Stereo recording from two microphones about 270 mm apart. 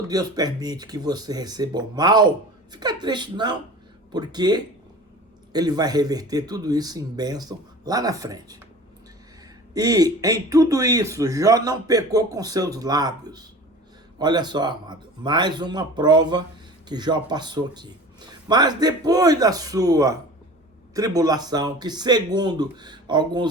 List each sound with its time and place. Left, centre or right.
0.1 s speech: centre
9.7 s speech: centre